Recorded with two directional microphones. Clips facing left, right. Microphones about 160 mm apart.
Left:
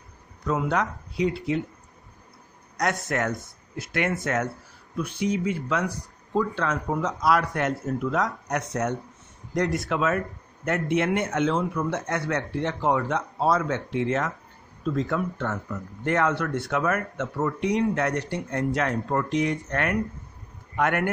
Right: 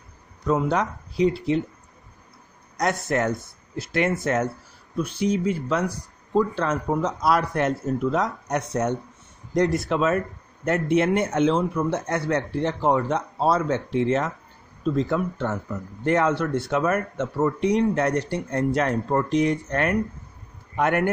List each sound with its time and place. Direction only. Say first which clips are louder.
0.5 s speech: right 3 dB; 30° right (ahead or behind)
2.8 s speech: right 3 dB; 30° right (ahead or behind)